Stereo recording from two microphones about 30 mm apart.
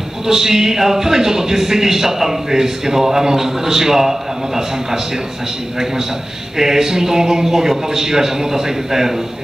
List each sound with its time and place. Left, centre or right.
0.3 s a man's voice: centre
6.6 s a man's voice: centre